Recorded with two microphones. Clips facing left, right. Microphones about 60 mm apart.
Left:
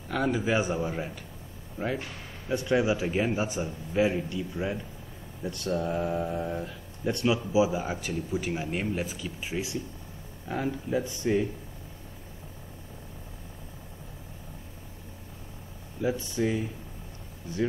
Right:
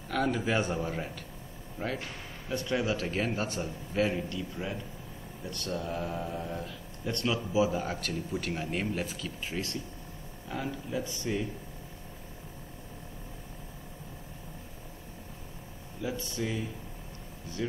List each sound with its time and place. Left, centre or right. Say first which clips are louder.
0.1 s speech: left 2 dB; centre
16.0 s speech: left 6 dB; left